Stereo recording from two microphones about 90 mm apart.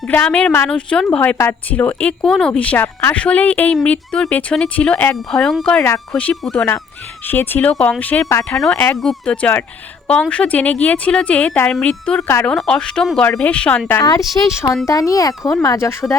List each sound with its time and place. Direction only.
0.1 s speech: 15° left (ahead or behind)
7.3 s speech: 20° left (ahead or behind)
8.4 s speech: 5° left (ahead or behind)
8.7 s speech: 20° left (ahead or behind)
9.0 s speech: 5° left (ahead or behind)
14.4 s speech: 35° left (ahead or behind)